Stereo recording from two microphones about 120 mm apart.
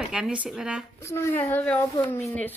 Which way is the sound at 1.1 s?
20° left (ahead or behind).